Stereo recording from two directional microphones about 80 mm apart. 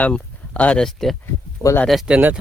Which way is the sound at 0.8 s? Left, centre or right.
Centre.